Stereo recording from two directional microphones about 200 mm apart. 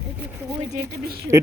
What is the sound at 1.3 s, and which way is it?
Speech, 15° right (ahead or behind).